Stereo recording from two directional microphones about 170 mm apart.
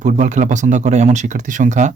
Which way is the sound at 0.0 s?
45° right (ahead or behind).